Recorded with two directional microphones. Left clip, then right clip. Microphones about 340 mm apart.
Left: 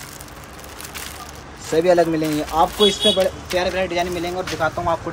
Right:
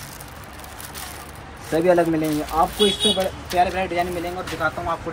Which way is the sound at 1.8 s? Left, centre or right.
Centre.